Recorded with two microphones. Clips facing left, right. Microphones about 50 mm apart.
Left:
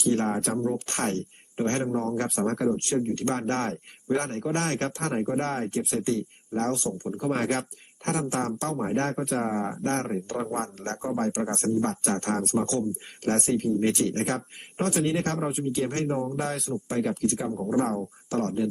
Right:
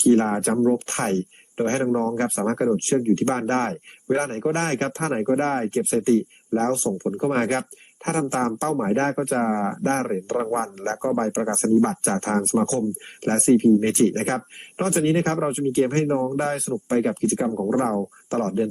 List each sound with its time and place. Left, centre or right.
0.0 s speech: right
17.5 s speech: right
17.7 s speech: right